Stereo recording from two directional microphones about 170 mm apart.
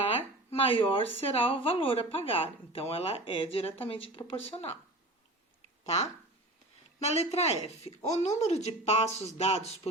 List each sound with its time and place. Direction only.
0.6 s speech: 35° left (ahead or behind)
7.0 s speech: 40° left (ahead or behind)